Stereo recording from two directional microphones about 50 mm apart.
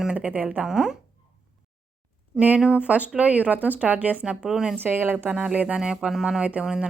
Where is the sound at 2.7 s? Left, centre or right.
Right.